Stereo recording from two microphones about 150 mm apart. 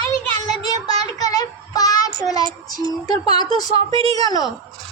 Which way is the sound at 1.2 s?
25° left (ahead or behind).